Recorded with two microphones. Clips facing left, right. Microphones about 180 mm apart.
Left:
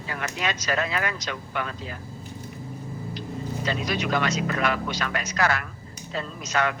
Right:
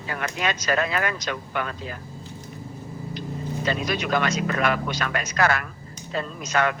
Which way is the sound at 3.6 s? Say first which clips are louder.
Right 2 dB; 50° right (ahead or behind).